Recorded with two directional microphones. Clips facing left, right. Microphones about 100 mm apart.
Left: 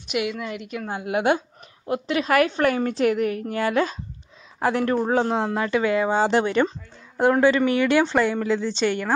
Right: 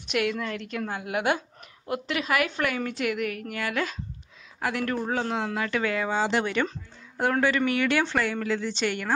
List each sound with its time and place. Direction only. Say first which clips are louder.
0.0 s a woman's voice: left 1 dB; 5° left (ahead or behind)
0.8 s speech: left 5 dB; 25° left (ahead or behind)
2.2 s a woman's voice: left 8 dB; 40° left (ahead or behind)
5.7 s speech: left 6 dB; 20° left (ahead or behind)
6.1 s a woman's voice: left 6 dB; 35° left (ahead or behind)